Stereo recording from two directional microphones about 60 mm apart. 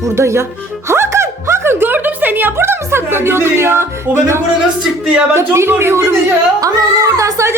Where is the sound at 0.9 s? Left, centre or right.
Right.